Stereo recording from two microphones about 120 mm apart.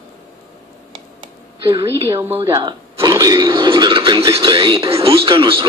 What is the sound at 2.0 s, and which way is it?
Speech, 25° right (ahead or behind).